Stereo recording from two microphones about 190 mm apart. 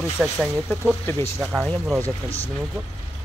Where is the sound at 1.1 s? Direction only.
15° left (ahead or behind).